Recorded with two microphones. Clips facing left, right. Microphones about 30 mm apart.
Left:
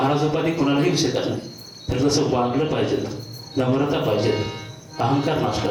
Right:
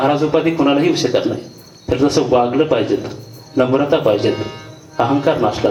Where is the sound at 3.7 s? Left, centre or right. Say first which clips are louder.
Right 6 dB; right.